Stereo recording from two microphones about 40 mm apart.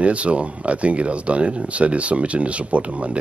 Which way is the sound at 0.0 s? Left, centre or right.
Right.